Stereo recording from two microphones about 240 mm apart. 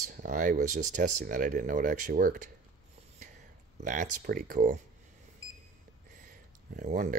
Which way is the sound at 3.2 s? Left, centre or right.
Right.